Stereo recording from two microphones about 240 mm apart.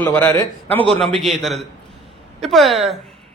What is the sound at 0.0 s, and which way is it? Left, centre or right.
A man's voice, centre.